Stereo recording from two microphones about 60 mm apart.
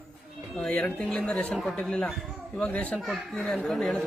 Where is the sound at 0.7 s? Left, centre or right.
Centre.